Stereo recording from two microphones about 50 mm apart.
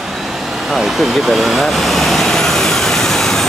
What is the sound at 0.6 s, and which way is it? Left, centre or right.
Vehicle, centre.